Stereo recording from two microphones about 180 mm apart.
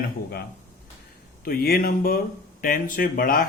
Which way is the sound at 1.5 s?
55° left (ahead or behind).